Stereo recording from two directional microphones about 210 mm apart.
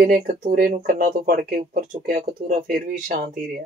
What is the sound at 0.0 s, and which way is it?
Speech, 40° right (ahead or behind).